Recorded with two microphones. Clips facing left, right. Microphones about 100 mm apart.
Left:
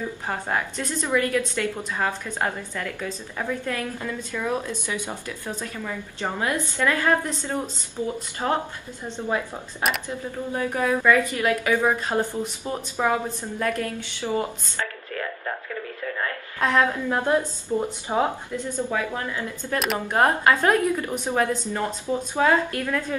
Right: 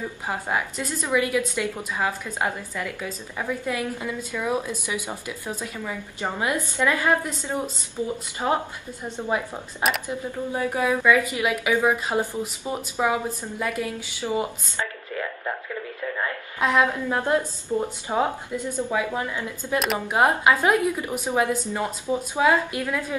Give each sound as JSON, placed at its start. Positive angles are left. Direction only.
{"t": 0.3, "sound": "a woman's voice", "side_deg": -10}
{"t": 9.0, "sound": "a woman's voice", "side_deg": -15}
{"t": 14.3, "sound": "a sound", "side_deg": -15}
{"t": 17.1, "sound": "a woman's voice", "side_deg": 15}
{"t": 18.6, "sound": "a woman's voice", "side_deg": -15}
{"t": 19.8, "sound": "a woman's voice", "side_deg": -5}